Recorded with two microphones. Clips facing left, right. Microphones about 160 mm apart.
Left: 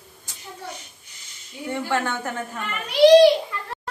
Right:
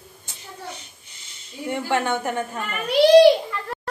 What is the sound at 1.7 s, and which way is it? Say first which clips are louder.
Speech: right 2 dB; 20° right (ahead or behind).